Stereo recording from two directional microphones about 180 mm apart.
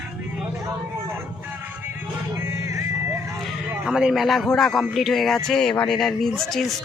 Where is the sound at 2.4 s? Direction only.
15° right (ahead or behind).